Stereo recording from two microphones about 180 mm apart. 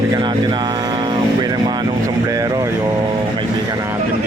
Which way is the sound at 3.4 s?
20° right (ahead or behind).